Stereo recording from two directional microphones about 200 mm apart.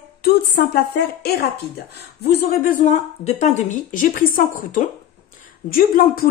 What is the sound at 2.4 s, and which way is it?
A woman's voice, 40° left (ahead or behind).